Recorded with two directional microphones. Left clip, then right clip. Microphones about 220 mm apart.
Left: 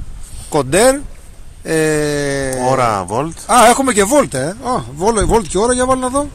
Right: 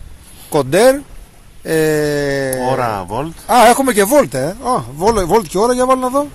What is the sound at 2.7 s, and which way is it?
Speech, 30° left (ahead or behind).